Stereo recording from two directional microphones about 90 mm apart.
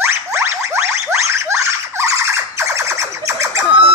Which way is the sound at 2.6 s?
35° right (ahead or behind).